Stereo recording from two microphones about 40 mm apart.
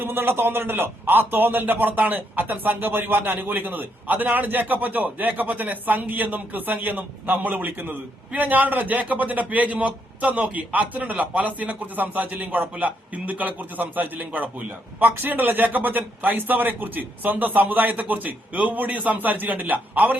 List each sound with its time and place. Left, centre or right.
0.0 s a man's voice: right